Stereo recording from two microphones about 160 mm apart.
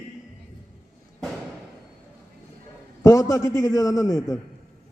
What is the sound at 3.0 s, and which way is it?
A man's voice, 20° left (ahead or behind).